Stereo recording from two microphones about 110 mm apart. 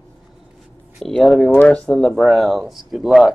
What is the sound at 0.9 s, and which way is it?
Speech, centre (ahead or behind).